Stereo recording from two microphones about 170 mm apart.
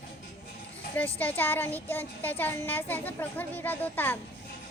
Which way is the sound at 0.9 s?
10° left (ahead or behind).